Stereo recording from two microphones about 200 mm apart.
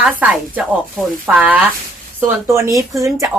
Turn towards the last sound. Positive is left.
turn(degrees=-15)  # may be behind; listen again after turning